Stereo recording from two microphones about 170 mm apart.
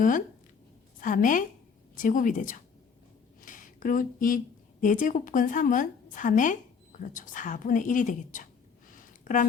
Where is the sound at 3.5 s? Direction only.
50° left (ahead or behind).